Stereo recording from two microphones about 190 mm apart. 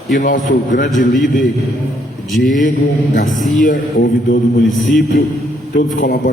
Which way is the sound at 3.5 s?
45° left (ahead or behind).